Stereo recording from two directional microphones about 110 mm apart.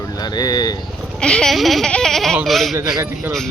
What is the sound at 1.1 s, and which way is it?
Speech, 5° left (ahead or behind).